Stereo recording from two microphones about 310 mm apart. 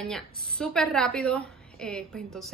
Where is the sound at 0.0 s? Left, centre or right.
Centre.